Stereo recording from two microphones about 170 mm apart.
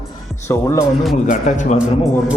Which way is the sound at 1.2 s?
50° left (ahead or behind).